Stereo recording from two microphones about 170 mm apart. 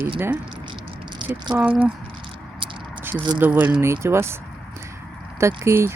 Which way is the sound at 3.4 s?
10° right (ahead or behind).